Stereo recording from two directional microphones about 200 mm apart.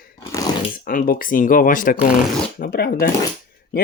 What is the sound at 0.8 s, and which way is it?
Speech, 45° left (ahead or behind).